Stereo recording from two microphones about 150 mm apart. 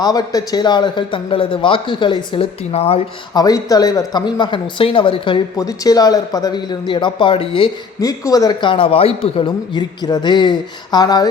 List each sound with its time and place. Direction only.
0.0 s a man's voice: 25° left (ahead or behind)
3.3 s speech: 25° left (ahead or behind)
7.9 s speech: 25° left (ahead or behind)